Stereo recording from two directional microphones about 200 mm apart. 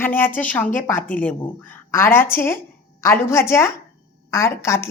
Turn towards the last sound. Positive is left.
turn(degrees=15)  # may be behind; listen again after turning